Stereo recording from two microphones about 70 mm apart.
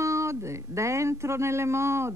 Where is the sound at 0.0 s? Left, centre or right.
Right.